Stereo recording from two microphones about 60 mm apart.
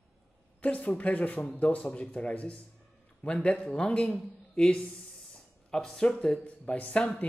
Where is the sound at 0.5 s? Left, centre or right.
Left.